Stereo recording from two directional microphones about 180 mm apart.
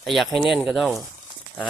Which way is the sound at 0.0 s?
Centre (ahead or behind).